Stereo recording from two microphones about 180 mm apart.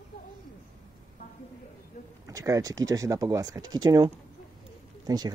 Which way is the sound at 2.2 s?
20° right (ahead or behind).